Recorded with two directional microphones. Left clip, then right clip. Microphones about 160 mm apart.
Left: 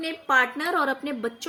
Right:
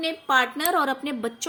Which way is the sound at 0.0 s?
20° right (ahead or behind).